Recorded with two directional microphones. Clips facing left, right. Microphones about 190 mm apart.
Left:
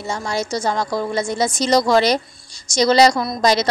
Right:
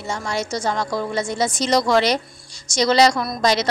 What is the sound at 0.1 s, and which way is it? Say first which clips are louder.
A woman's voice: left 2 dB; 35° left (ahead or behind).